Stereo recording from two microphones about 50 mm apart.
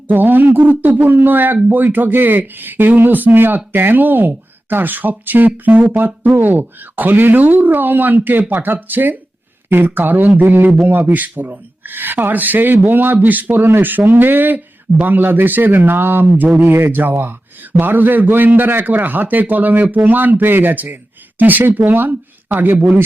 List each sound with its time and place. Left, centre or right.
0.1 s a man's voice: right